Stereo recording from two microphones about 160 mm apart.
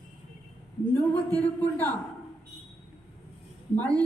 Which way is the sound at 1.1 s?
10° left (ahead or behind).